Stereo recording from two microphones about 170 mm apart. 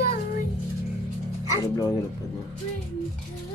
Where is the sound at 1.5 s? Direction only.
20° left (ahead or behind).